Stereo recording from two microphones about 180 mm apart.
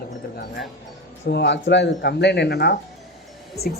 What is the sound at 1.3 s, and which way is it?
Speech, 75° left (ahead or behind).